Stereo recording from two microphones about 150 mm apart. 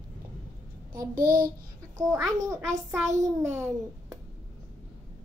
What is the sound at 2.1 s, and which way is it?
A child's voice, 20° right (ahead or behind).